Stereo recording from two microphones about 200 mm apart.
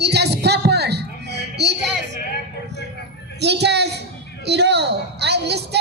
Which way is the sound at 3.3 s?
55° right (ahead or behind).